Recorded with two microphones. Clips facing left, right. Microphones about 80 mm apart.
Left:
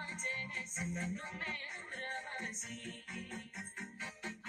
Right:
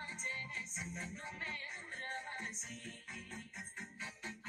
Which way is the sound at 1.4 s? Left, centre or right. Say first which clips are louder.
Left 2 dB; left.